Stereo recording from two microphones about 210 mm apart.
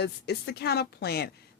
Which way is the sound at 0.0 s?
50° left (ahead or behind).